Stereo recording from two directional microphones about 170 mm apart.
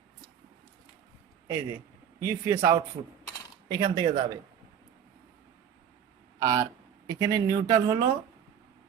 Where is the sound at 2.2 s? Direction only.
15° right (ahead or behind).